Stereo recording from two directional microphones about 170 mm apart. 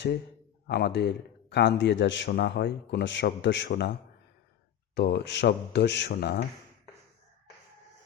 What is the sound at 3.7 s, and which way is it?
Speech, 70° left (ahead or behind).